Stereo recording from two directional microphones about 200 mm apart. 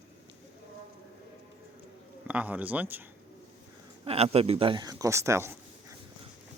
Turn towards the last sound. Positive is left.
turn(degrees=-15)  # may be behind; listen again after turning